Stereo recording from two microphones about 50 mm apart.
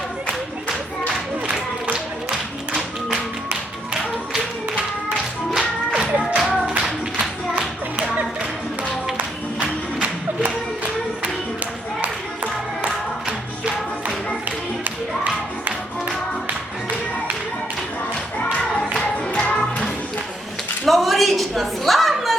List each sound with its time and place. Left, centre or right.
1.0 s clapping: right
6.1 s music: centre
6.5 s music: centre
9.1 s music: right
12.0 s music: right
14.4 s music: right
19.3 s music: left
20.8 s a sound: centre